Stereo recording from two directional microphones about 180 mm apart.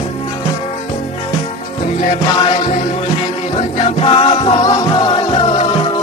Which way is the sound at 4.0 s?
30° left (ahead or behind).